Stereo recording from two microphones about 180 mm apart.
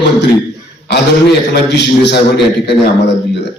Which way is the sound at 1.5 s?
70° left (ahead or behind).